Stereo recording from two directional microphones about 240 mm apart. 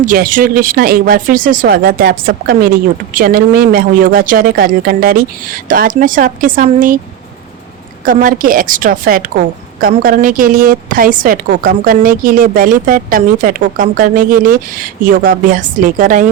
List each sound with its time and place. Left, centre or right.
0.0 s a woman's voice: right
8.0 s a woman's voice: right